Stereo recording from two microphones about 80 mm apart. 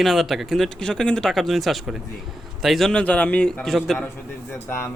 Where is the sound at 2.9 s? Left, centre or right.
Centre.